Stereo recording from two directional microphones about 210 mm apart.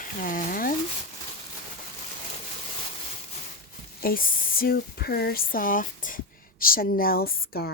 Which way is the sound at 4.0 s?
45° left (ahead or behind).